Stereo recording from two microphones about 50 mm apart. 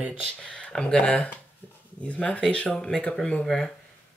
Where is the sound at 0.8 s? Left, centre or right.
Left.